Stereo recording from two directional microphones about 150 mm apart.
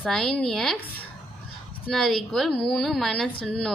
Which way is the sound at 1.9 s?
Centre (ahead or behind).